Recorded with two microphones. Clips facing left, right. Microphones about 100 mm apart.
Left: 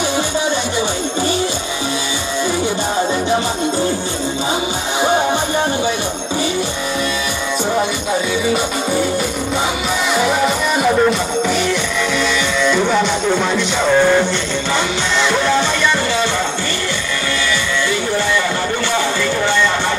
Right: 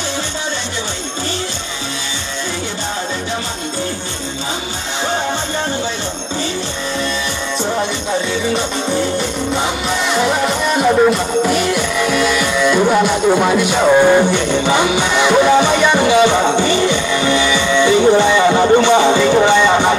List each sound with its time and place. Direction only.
10.1 s music: centre (ahead or behind); by 20.0 s 15° right (ahead or behind)